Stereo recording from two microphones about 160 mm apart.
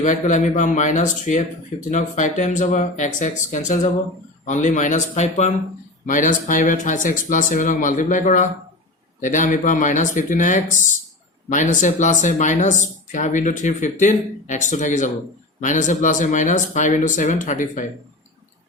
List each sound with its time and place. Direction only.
0.0 s speech: 50° left (ahead or behind)